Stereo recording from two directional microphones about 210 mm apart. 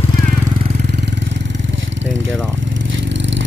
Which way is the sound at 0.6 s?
30° right (ahead or behind).